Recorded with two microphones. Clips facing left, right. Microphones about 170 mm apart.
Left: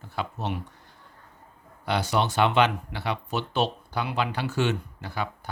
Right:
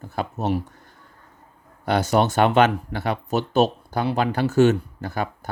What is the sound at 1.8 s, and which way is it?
Speech, 45° right (ahead or behind).